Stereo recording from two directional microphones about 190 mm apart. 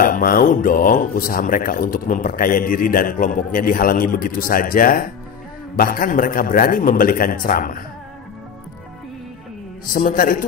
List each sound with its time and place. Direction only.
0.0 s speech: 45° left (ahead or behind)
9.9 s speech: 45° left (ahead or behind)